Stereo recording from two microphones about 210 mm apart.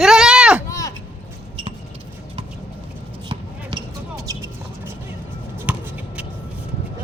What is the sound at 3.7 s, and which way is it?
Basketball bounce, 20° right (ahead or behind).